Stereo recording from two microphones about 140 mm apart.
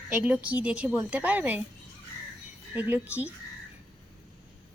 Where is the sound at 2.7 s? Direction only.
10° right (ahead or behind).